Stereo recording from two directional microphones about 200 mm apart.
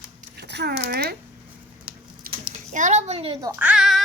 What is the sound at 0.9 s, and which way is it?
Speech, 50° right (ahead or behind).